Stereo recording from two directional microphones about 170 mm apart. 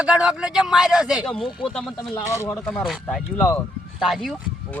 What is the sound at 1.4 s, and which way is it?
Speech, 30° left (ahead or behind).